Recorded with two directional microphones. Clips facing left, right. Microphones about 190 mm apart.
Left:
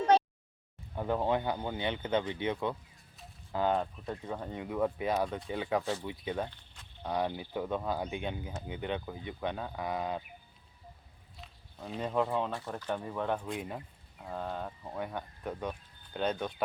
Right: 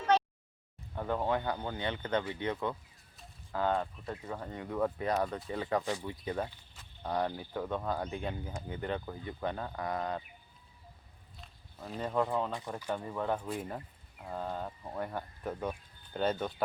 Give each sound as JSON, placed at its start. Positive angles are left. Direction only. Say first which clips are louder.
{"t": 0.9, "sound": "speech", "louder": "left 2 dB", "side_deg": 15}
{"t": 3.9, "sound": "speech", "louder": "left 2 dB", "side_deg": 0}
{"t": 7.3, "sound": "speech", "louder": "left 1 dB", "side_deg": 10}
{"t": 8.8, "sound": "speech", "louder": "even", "side_deg": 0}
{"t": 11.3, "sound": "a sound", "louder": "left 2 dB", "side_deg": 0}
{"t": 12.0, "sound": "speech", "louder": "left 1 dB", "side_deg": 10}
{"t": 12.5, "sound": "speech", "louder": "left 1 dB", "side_deg": -15}